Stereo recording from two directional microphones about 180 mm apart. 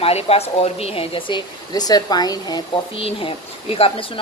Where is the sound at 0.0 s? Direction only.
35° left (ahead or behind).